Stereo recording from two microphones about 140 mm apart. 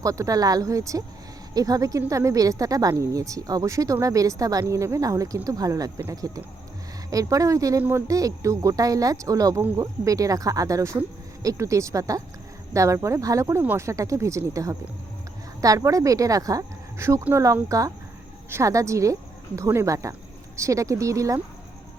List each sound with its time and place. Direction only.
0.0 s speech: 25° right (ahead or behind)
8.0 s speech: 25° right (ahead or behind)